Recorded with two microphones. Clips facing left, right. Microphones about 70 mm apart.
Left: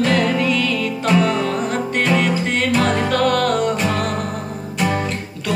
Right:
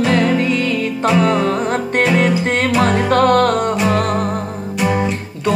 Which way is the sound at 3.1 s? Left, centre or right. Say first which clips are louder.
Right 5 dB; right.